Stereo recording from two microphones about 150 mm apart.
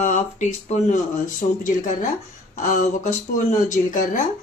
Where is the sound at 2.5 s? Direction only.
55° left (ahead or behind).